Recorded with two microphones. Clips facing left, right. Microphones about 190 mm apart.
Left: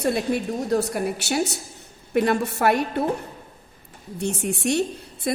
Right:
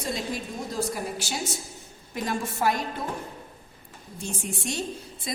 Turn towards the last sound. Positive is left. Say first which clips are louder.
# left 8 dB
turn(degrees=60)  # may be behind; listen again after turning